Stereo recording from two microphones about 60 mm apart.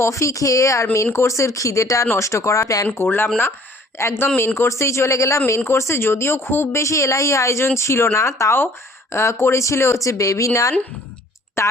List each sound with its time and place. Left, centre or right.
0.0 s speech: left
2.8 s speech: left
4.0 s speech: left
4.4 s speech: left
6.7 s speech: left
11.6 s a sound: left